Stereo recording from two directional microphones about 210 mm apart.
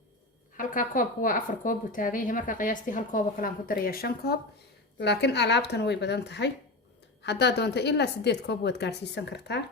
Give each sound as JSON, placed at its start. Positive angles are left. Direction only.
{"t": 0.5, "sound": "a woman's voice", "side_deg": 40}